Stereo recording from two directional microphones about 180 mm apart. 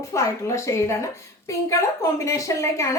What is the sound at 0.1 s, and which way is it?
Speech, 15° left (ahead or behind).